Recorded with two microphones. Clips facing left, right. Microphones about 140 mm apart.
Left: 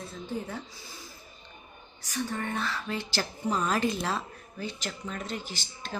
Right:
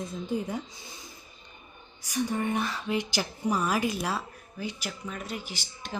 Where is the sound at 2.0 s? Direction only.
15° right (ahead or behind).